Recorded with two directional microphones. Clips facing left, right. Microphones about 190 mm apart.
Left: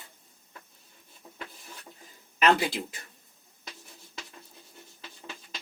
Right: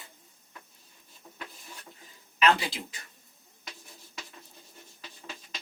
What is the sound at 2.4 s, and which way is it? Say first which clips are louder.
Speech: left 2 dB; 55° left (ahead or behind).